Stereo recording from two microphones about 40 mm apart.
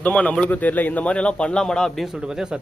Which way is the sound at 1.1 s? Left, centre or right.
Left.